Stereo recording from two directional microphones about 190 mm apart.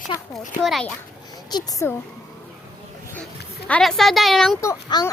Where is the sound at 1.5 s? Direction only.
20° left (ahead or behind).